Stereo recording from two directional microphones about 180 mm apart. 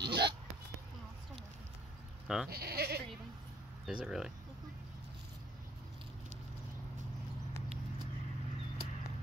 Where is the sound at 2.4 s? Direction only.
60° right (ahead or behind).